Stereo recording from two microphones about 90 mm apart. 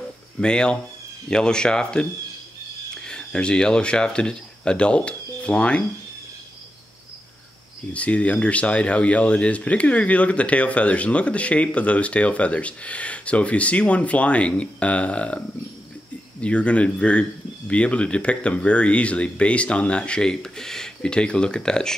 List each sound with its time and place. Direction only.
0.4 s speech: 10° left (ahead or behind)
3.1 s speech: 10° left (ahead or behind)
7.9 s speech: 15° left (ahead or behind)